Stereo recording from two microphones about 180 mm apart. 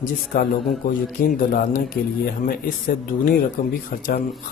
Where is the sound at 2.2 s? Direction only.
55° left (ahead or behind).